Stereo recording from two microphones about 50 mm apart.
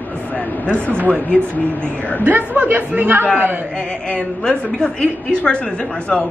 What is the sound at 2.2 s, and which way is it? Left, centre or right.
A man's voice, right.